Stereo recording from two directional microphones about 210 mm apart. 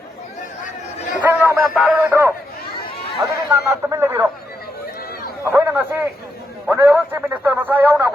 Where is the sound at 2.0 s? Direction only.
10° right (ahead or behind).